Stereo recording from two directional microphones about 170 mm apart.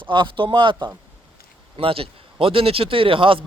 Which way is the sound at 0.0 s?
30° right (ahead or behind).